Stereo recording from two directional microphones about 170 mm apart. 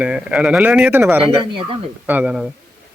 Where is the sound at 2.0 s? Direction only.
10° right (ahead or behind).